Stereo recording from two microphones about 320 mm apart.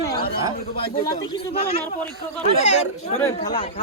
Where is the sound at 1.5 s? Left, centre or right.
Centre.